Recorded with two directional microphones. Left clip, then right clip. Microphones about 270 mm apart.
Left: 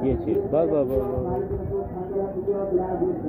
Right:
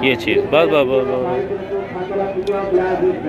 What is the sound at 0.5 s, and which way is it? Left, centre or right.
Speech, right.